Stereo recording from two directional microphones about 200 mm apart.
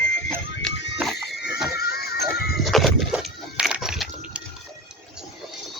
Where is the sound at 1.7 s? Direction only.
50° left (ahead or behind).